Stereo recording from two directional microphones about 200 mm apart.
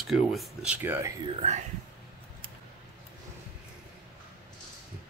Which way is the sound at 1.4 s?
35° right (ahead or behind).